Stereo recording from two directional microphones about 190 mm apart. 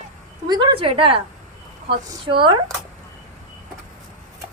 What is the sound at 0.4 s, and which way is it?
A woman's voice, 25° right (ahead or behind).